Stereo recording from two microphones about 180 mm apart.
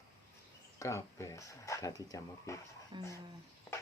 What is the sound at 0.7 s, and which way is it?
Speech, 15° left (ahead or behind).